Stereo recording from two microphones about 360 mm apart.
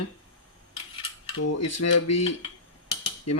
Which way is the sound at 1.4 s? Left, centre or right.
Left.